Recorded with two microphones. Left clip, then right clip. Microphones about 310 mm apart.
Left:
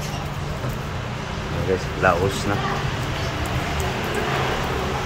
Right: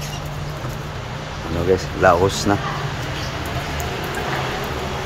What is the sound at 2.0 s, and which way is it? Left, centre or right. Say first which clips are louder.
Speech: right 4 dB; right.